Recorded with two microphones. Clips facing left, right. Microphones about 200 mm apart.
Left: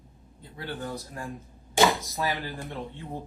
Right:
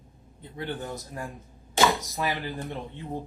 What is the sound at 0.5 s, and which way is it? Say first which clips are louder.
Speech: right 1 dB; 20° right (ahead or behind).